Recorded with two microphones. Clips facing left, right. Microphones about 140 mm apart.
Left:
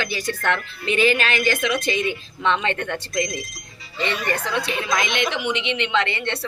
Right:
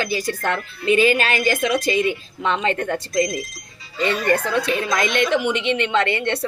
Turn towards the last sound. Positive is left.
turn(degrees=-50)  # may be behind; listen again after turning